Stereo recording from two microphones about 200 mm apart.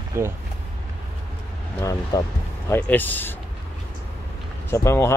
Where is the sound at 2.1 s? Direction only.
15° left (ahead or behind).